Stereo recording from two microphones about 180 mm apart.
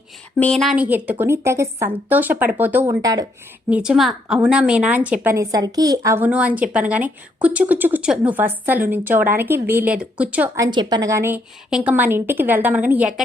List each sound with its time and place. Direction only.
0.3 s a woman's voice: 5° left (ahead or behind); by 3.2 s 20° right (ahead or behind)
3.7 s a woman's voice: 5° right (ahead or behind)
10.6 s a woman's voice: 25° right (ahead or behind)